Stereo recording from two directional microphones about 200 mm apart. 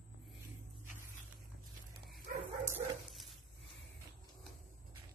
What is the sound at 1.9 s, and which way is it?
Bow-wow, 45° right (ahead or behind).